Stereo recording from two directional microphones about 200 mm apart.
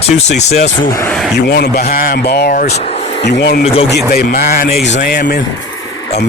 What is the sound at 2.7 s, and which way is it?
Speech, 30° left (ahead or behind).